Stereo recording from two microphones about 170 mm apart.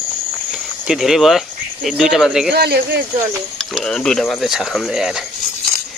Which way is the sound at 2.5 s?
70° right (ahead or behind).